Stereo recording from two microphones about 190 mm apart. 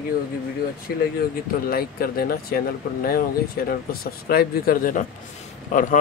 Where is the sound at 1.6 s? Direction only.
50° left (ahead or behind).